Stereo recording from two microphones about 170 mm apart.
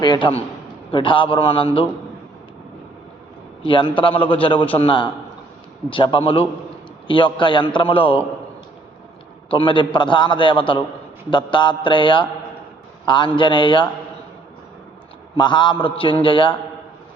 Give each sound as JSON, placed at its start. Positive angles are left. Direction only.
{"t": 0.0, "sound": "a man's voice", "side_deg": 25}
{"t": 3.6, "sound": "a man's voice", "side_deg": 30}
{"t": 9.5, "sound": "a man's voice", "side_deg": 30}
{"t": 15.4, "sound": "a man's voice", "side_deg": 25}